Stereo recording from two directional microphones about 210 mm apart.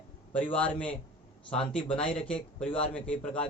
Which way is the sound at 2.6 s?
25° left (ahead or behind).